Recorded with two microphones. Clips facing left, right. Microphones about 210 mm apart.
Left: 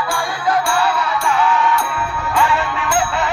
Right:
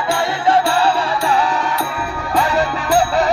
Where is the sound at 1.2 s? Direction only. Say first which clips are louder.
Left 3 dB; 35° right (ahead or behind).